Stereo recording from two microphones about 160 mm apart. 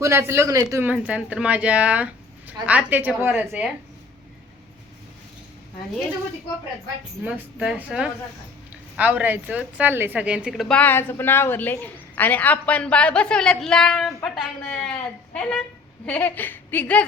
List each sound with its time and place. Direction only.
0.0 s speech: 15° right (ahead or behind)
7.3 s a woman's voice: 5° right (ahead or behind); by 17.1 s 10° left (ahead or behind)